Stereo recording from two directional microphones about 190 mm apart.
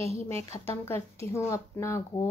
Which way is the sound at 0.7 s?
15° left (ahead or behind).